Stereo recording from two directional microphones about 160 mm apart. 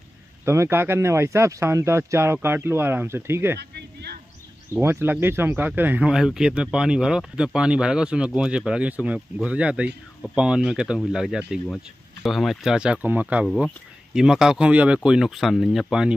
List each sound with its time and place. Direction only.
0.5 s speech: 15° right (ahead or behind)
3.5 s a sound: 90° right
4.7 s speech: 15° right (ahead or behind)